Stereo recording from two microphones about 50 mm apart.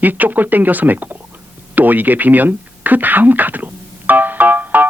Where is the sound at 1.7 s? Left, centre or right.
Right.